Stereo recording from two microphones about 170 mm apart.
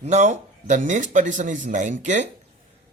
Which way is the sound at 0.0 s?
40° right (ahead or behind).